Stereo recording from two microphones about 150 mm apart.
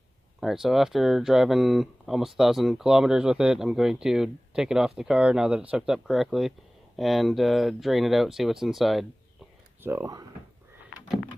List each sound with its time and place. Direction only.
0.3 s speech: centre (ahead or behind)
9.8 s speech: 15° right (ahead or behind)